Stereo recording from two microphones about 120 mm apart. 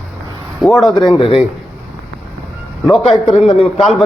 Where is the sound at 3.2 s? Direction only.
55° left (ahead or behind).